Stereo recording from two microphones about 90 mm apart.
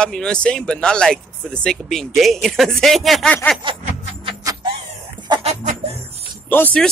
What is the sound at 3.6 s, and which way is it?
Music, 70° right (ahead or behind).